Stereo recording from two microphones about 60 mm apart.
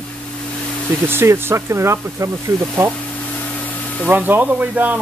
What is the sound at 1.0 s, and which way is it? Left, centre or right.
Speech, right.